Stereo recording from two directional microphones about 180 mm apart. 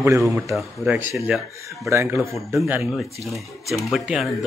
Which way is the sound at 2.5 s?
5° right (ahead or behind).